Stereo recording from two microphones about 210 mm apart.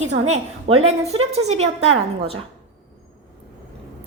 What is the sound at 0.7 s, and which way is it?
A woman's voice, 30° right (ahead or behind).